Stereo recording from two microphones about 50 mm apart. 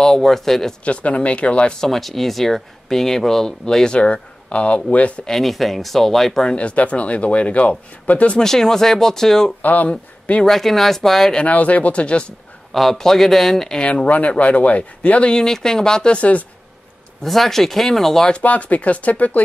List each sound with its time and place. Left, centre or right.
0.0 s speech: centre
0.8 s speech: left
1.8 s speech: centre; by 5.2 s left
5.2 s speech: centre
6.5 s speech: left
8.4 s speech: centre
9.6 s speech: left
10.4 s speech: centre
11.4 s speech: left
12.7 s speech: centre
14.0 s speech: left
15.3 s speech: centre; by 16.4 s left
17.2 s speech: centre
18.4 s speech: left